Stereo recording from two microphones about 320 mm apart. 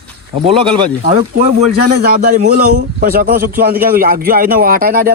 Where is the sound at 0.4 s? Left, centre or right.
Centre.